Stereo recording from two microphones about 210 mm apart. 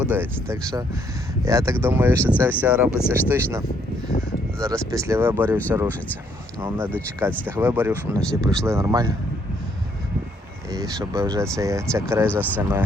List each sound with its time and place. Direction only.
0.0 s speech: 10° right (ahead or behind)
4.9 s speech: 15° right (ahead or behind)
6.6 s speech: 10° right (ahead or behind)
8.2 s speech: 5° left (ahead or behind)
8.6 s speech: 15° right (ahead or behind)
10.7 s speech: 15° right (ahead or behind)